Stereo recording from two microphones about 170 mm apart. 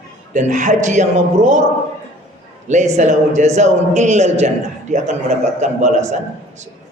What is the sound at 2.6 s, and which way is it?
A man's voice, 45° right (ahead or behind).